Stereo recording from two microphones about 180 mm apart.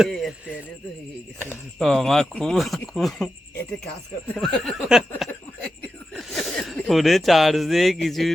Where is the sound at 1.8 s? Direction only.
Centre (ahead or behind).